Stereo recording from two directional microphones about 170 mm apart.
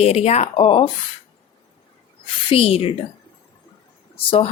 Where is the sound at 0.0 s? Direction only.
35° left (ahead or behind).